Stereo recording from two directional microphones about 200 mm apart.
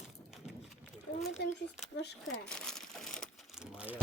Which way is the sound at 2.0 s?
55° left (ahead or behind).